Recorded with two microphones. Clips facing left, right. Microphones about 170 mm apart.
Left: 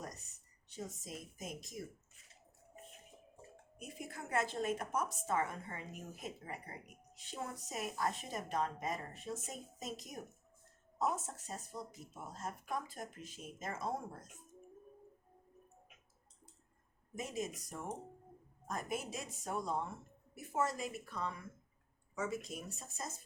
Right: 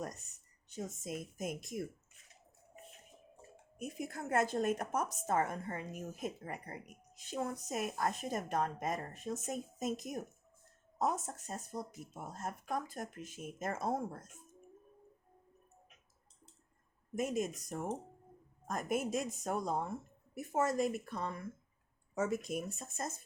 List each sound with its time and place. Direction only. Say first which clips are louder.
0.7 s speech: right 5 dB; 50° right (ahead or behind)
3.8 s speech: right 6 dB; 50° right (ahead or behind)
11.4 s speech: right 4 dB; 45° right (ahead or behind)
17.2 s speech: right 6 dB; 50° right (ahead or behind)